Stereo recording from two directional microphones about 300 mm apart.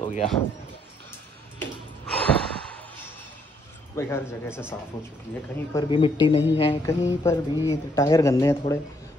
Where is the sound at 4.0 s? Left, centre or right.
Centre.